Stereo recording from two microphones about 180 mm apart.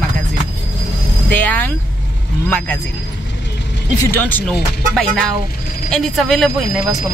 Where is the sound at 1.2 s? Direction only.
10° left (ahead or behind).